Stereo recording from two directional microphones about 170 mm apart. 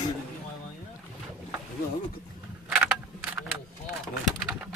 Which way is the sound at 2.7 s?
5° right (ahead or behind).